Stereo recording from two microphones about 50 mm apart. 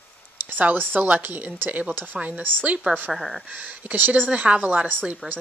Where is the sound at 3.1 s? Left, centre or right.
Centre.